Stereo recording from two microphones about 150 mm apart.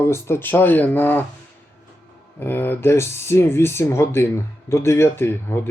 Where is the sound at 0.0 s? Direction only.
15° left (ahead or behind).